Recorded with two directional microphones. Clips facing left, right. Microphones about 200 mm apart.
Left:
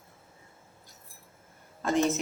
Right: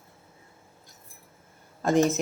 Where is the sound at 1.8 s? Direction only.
45° right (ahead or behind).